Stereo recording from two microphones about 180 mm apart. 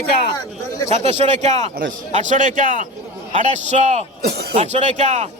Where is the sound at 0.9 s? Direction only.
35° right (ahead or behind).